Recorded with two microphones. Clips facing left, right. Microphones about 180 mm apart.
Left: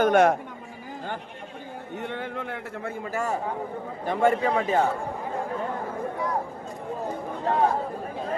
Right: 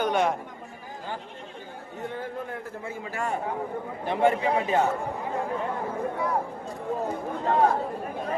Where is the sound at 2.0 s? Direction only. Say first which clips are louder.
Even; 75° left (ahead or behind).